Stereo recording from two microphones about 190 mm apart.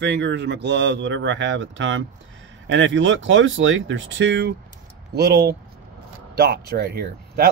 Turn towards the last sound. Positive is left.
turn(degrees=-55)  # may be behind; listen again after turning